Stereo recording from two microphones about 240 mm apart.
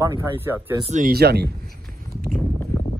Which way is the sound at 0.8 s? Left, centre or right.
Right.